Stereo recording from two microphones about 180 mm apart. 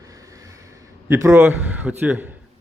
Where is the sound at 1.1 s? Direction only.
15° right (ahead or behind).